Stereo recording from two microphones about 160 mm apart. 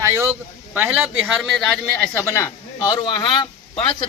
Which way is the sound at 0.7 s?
10° right (ahead or behind).